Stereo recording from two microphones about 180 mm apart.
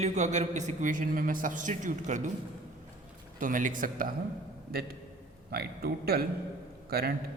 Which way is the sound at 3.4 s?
45° right (ahead or behind).